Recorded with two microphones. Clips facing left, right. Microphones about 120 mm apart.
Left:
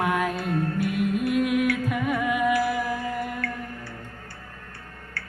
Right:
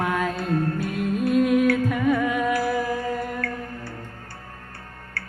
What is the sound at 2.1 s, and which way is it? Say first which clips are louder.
Music: right 1 dB; 10° left (ahead or behind).